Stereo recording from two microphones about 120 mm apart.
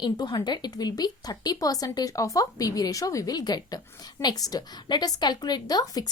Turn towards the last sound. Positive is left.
turn(degrees=30)  # may be behind; listen again after turning